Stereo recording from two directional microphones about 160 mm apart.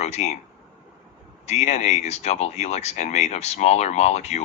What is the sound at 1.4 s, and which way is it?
Speech, 45° left (ahead or behind).